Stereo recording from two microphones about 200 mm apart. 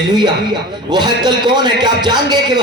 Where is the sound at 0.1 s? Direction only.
20° right (ahead or behind).